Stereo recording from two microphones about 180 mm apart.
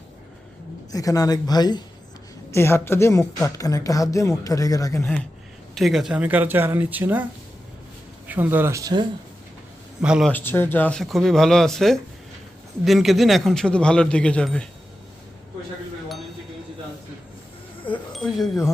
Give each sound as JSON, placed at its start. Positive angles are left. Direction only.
{"t": 0.9, "sound": "a woman's voice", "side_deg": 20}
{"t": 5.7, "sound": "speech", "side_deg": 0}
{"t": 8.3, "sound": "speech", "side_deg": -10}
{"t": 10.0, "sound": "speech", "side_deg": -5}
{"t": 10.3, "sound": "speech", "side_deg": 10}
{"t": 18.1, "sound": "speech", "side_deg": 0}